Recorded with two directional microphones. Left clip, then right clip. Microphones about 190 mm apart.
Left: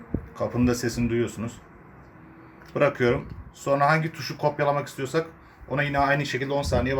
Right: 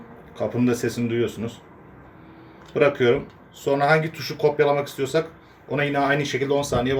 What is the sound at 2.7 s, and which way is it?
Speech, 40° left (ahead or behind).